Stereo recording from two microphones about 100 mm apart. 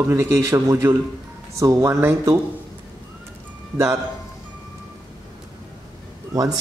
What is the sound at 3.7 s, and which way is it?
Speech, 35° right (ahead or behind).